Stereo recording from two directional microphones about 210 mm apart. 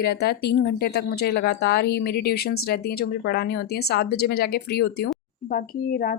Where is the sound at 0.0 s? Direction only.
50° left (ahead or behind).